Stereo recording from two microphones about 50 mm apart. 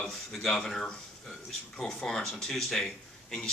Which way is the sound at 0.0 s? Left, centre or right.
Centre.